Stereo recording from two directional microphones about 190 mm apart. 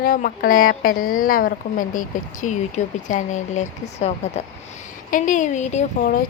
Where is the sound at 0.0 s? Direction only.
50° left (ahead or behind).